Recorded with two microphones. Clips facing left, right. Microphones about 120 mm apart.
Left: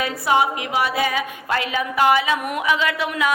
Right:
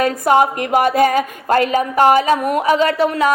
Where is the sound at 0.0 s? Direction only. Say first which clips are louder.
Right 6 dB; 45° right (ahead or behind).